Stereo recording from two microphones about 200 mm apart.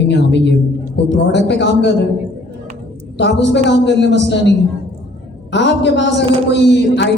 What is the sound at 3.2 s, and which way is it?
Speech, 60° left (ahead or behind).